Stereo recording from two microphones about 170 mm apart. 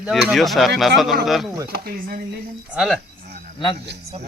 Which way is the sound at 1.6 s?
65° right (ahead or behind).